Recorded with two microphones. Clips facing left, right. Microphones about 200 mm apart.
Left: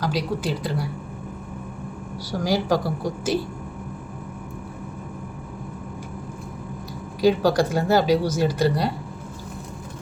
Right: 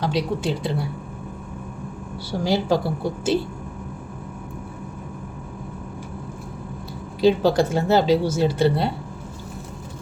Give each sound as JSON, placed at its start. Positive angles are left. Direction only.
{"t": 0.0, "sound": "a woman's voice", "side_deg": -25}
{"t": 2.4, "sound": "a woman's voice", "side_deg": -25}
{"t": 7.2, "sound": "a woman's voice", "side_deg": -25}